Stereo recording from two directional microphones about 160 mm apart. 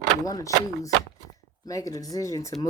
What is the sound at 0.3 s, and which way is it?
Speech, 20° left (ahead or behind).